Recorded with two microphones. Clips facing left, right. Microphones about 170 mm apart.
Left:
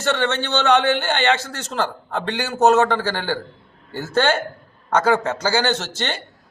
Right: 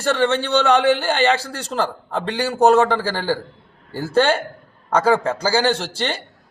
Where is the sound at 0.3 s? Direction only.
35° right (ahead or behind).